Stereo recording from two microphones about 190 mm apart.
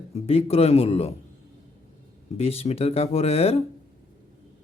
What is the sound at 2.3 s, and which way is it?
Speech, 30° left (ahead or behind).